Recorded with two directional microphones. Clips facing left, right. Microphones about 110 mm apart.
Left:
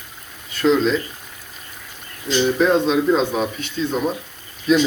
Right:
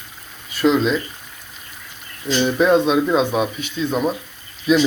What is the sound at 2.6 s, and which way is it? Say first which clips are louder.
Speech: right 4 dB; 15° right (ahead or behind).